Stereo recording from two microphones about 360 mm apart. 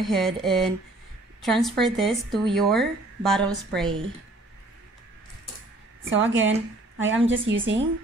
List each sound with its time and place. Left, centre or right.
0.0 s speech: centre
6.0 s a woman's voice: right